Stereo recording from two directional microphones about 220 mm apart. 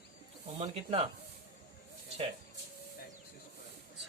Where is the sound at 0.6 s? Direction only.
25° right (ahead or behind).